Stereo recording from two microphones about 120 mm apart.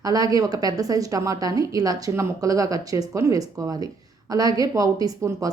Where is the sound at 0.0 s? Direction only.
30° right (ahead or behind).